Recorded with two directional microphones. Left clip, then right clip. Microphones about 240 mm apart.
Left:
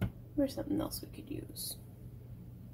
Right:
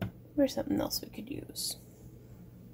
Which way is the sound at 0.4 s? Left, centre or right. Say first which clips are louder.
Right 5 dB; right.